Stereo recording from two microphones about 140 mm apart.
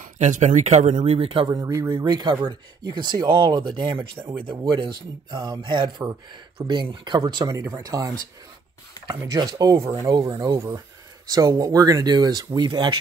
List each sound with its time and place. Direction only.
0.0 s speech: 60° right (ahead or behind); by 1.5 s 40° right (ahead or behind)
1.5 s speech: 25° right (ahead or behind)
7.4 s speech: 20° right (ahead or behind)
9.0 s a sound: 30° left (ahead or behind)
9.4 s speech: 30° right (ahead or behind)